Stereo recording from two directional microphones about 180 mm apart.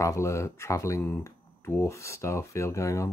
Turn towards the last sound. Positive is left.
turn(degrees=15)  # may be behind; listen again after turning